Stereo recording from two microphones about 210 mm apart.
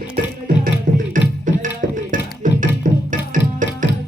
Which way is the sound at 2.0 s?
40° right (ahead or behind).